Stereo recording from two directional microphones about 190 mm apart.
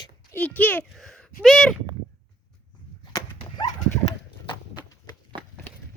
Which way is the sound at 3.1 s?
20° left (ahead or behind).